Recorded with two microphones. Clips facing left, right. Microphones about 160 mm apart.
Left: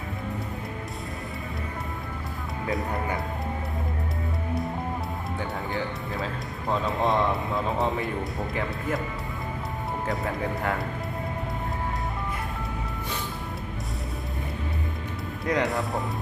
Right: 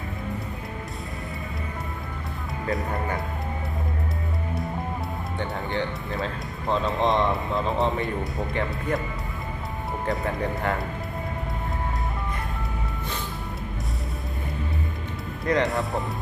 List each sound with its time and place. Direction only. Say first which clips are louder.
2.6 s speech: right 1 dB; centre (ahead or behind)
5.4 s speech: right 3 dB; 5° left (ahead or behind)
10.1 s speech: right 3 dB; centre (ahead or behind)
15.4 s speech: right 2 dB; 5° left (ahead or behind)